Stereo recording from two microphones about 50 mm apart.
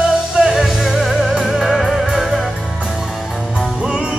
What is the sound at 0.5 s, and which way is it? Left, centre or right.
Music, centre.